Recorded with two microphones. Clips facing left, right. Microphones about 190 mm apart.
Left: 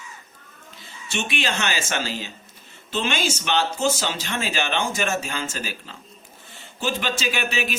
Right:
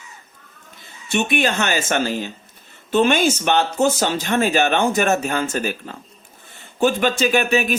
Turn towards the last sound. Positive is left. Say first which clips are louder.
# right 8 dB
turn(degrees=-50)  # may be behind; listen again after turning